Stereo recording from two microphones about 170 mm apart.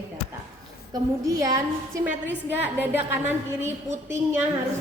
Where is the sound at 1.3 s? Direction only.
20° right (ahead or behind).